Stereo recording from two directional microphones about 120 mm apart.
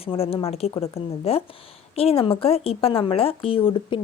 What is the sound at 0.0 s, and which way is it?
Speech, 55° left (ahead or behind).